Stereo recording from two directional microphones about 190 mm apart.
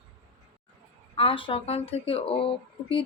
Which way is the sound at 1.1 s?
30° left (ahead or behind).